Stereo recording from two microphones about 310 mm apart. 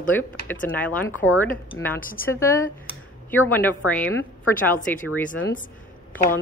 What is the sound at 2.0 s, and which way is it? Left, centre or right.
Speech, left.